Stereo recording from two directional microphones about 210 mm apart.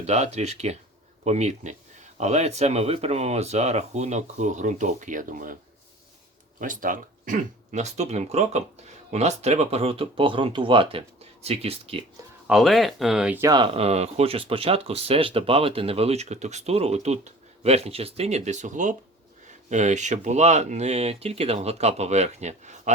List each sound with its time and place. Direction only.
0.0 s speech: 30° right (ahead or behind)
6.6 s speech: 40° right (ahead or behind)
12.5 s speech: centre (ahead or behind); by 22.9 s 35° right (ahead or behind)